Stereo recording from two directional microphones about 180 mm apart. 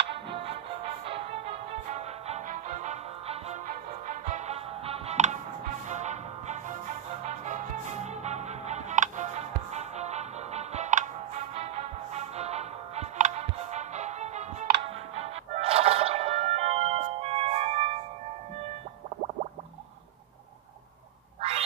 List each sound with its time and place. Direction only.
0.4 s music: 30° right (ahead or behind)
21.4 s music: 35° right (ahead or behind)